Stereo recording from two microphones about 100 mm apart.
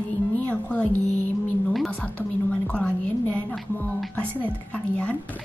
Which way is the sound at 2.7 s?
15° left (ahead or behind).